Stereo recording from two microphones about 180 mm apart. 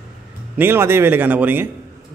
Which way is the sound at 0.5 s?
10° right (ahead or behind).